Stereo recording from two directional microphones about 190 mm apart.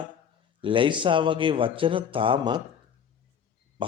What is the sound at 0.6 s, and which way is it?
A man's voice, 25° right (ahead or behind).